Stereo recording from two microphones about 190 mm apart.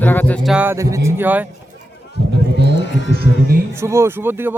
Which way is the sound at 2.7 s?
70° left (ahead or behind).